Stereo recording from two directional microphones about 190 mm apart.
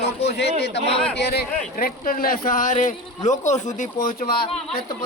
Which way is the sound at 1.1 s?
60° left (ahead or behind).